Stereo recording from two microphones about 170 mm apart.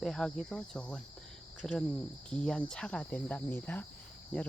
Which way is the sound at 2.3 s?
5° left (ahead or behind).